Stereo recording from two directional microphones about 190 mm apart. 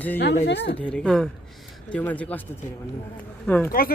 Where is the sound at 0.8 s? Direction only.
5° left (ahead or behind).